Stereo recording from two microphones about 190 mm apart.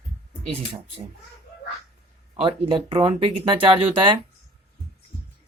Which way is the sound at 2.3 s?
30° right (ahead or behind).